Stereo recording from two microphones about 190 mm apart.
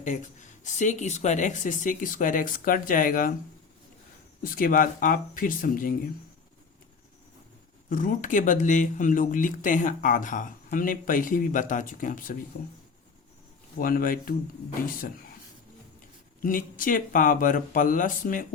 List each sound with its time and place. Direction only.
0.0 s speech: 40° left (ahead or behind)
4.4 s speech: 45° left (ahead or behind)
7.9 s speech: 45° left (ahead or behind)
13.7 s speech: 50° left (ahead or behind)
16.4 s speech: 45° left (ahead or behind)